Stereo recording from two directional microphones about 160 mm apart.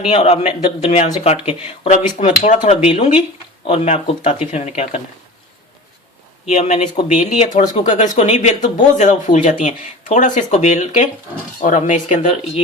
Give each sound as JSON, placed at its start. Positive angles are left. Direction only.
{"t": 0.0, "sound": "speech", "side_deg": 40}
{"t": 2.2, "sound": "speech", "side_deg": 55}
{"t": 2.6, "sound": "speech", "side_deg": 40}
{"t": 6.5, "sound": "speech", "side_deg": 45}